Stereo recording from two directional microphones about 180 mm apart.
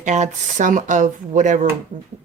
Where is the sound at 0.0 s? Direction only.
40° right (ahead or behind).